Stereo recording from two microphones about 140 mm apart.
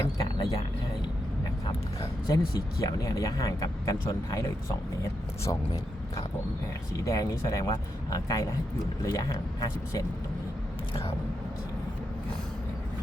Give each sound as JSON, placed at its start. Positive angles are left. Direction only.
{"t": 0.0, "sound": "music", "side_deg": 30}
{"t": 2.8, "sound": "speech", "side_deg": 25}
{"t": 5.5, "sound": "speech", "side_deg": 25}